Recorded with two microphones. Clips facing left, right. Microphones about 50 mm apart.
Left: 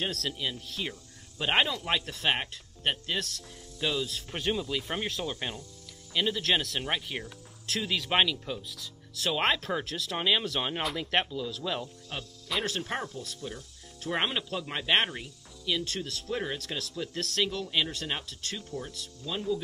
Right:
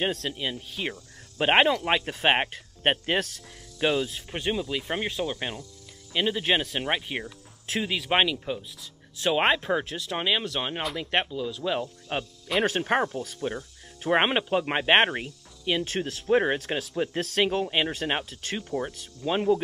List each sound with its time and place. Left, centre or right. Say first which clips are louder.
0.1 s speech: right 3 dB; centre
0.4 s speech: right 3 dB; right
3.3 s speech: right 4 dB; right
4.1 s speech: right 2 dB; centre
7.2 s music: right 2 dB; centre
8.0 s speech: right 3 dB; centre
8.7 s speech: left 2 dB; centre
9.3 s speech: right 5 dB; centre
12.1 s speech: right 7 dB; right
16.5 s speech: right 7 dB; right
16.9 s speech: right 6 dB; right